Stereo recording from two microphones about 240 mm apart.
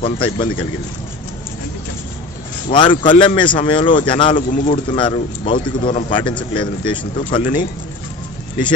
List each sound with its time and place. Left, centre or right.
0.0 s speech: left
2.7 s speech: centre
4.4 s speech: left
4.9 s speech: left